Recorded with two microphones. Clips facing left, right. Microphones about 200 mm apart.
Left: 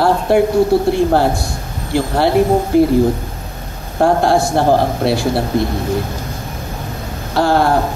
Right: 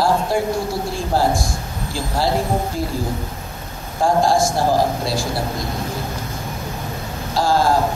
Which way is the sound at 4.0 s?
65° left (ahead or behind).